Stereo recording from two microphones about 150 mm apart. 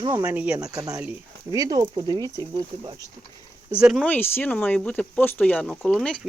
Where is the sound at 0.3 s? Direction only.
5° right (ahead or behind).